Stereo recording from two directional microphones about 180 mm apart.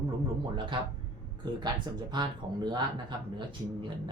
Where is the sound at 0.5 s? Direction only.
25° right (ahead or behind).